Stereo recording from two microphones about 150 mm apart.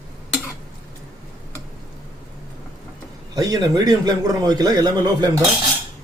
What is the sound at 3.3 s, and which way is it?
Speech, 25° right (ahead or behind).